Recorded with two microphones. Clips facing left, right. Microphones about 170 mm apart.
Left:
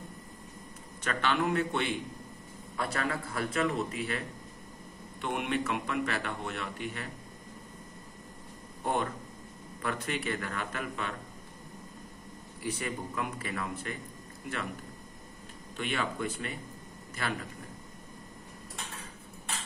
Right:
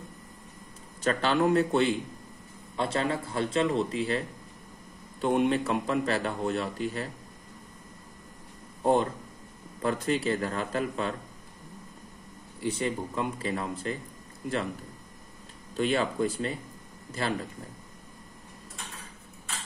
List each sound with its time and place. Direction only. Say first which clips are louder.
1.0 s a man's voice: right 5 dB; 35° right (ahead or behind)
5.2 s a man's voice: right 7 dB; 30° right (ahead or behind)
8.8 s a man's voice: right 7 dB; 30° right (ahead or behind)
12.5 s a man's voice: right 6 dB; 25° right (ahead or behind)
15.7 s a man's voice: right 7 dB; 35° right (ahead or behind)